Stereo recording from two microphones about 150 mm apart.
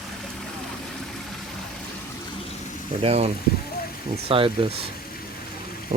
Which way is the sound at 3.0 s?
45° right (ahead or behind).